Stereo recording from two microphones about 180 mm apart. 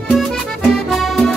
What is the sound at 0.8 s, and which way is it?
Accordion, centre (ahead or behind).